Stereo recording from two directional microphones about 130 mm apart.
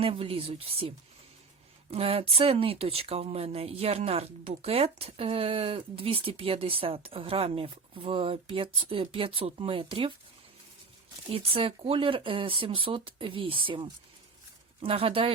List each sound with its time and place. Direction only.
0.0 s speech: 45° right (ahead or behind)
11.3 s speech: 45° right (ahead or behind)